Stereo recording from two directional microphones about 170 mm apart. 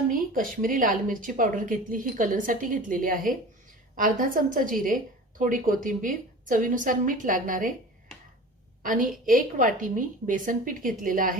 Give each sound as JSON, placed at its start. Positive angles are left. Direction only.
{"t": 0.1, "sound": "speech", "side_deg": -55}
{"t": 8.8, "sound": "speech", "side_deg": -55}